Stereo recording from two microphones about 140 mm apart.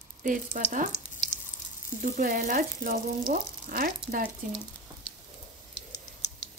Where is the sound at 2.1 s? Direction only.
70° right (ahead or behind).